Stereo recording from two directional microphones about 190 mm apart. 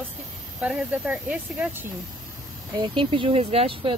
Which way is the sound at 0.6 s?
5° right (ahead or behind).